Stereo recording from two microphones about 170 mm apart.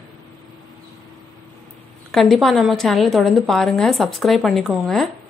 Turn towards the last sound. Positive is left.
turn(degrees=0)  # may be behind; listen again after turning